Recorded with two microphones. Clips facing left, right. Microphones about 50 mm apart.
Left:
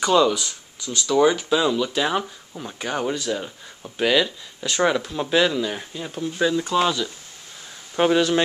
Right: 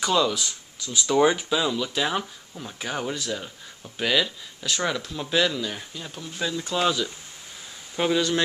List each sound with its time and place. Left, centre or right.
0.0 s speech: centre
1.1 s speech: centre
1.5 s speech: centre
7.9 s speech: left